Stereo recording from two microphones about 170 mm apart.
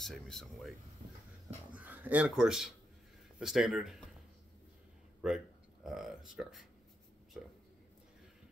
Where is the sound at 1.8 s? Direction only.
10° right (ahead or behind).